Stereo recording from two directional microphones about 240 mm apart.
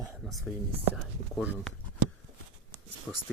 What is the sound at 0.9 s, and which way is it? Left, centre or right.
Speech, centre.